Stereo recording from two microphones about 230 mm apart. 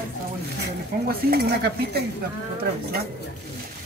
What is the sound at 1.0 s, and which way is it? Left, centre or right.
Speech, right.